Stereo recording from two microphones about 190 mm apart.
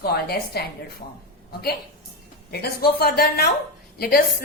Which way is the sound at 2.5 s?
55° left (ahead or behind).